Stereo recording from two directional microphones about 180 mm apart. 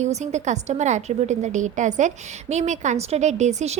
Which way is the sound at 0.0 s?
40° right (ahead or behind).